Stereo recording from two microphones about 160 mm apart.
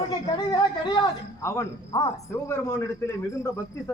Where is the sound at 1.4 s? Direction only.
20° left (ahead or behind).